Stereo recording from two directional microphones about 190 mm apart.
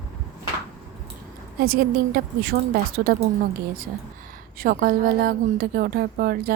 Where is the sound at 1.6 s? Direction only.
55° right (ahead or behind).